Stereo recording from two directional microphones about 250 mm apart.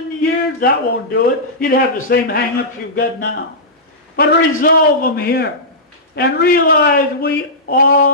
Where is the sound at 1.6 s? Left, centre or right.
Left.